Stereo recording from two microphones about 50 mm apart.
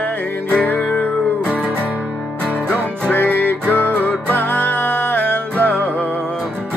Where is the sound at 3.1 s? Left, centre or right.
Left.